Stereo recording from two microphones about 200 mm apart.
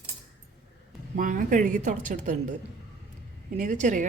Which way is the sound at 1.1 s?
40° right (ahead or behind).